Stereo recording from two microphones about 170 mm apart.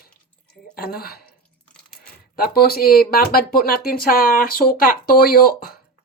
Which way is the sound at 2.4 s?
60° left (ahead or behind).